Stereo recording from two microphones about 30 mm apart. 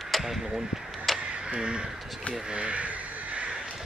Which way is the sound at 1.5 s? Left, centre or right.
Right.